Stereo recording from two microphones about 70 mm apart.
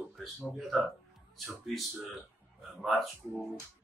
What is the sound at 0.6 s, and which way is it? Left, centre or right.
Speech, centre.